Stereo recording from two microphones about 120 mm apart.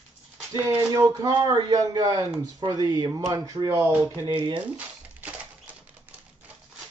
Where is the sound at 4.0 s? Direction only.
40° right (ahead or behind).